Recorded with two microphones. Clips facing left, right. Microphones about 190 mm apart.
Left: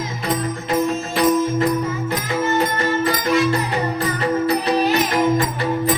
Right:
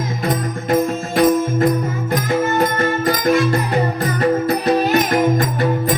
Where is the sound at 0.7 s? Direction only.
50° right (ahead or behind).